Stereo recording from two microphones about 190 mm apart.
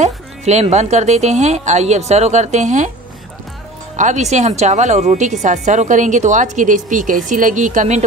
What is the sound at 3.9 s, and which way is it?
Speech, 40° right (ahead or behind).